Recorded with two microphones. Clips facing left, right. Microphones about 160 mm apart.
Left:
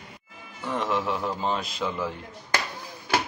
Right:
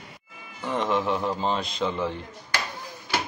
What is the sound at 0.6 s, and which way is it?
A man's voice, centre (ahead or behind).